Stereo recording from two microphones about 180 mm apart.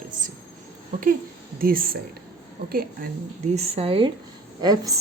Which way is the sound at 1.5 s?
55° right (ahead or behind).